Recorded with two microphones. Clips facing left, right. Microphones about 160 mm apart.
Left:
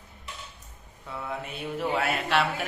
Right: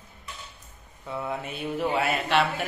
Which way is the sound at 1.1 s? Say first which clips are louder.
Right 3 dB; centre (ahead or behind).